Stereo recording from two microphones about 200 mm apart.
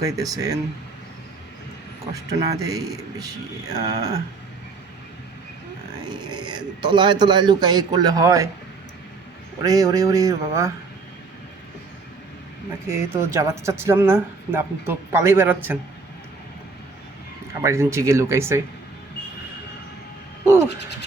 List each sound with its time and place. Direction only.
0.0 s speech: 20° right (ahead or behind)
2.1 s speech: 15° right (ahead or behind)
6.1 s speech: 20° right (ahead or behind)
9.6 s speech: 15° right (ahead or behind)
12.9 s speech: 15° right (ahead or behind)
17.6 s speech: 15° right (ahead or behind)
20.4 s a sound: 10° right (ahead or behind)